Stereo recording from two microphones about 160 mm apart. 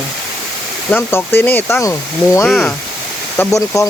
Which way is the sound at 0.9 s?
15° left (ahead or behind).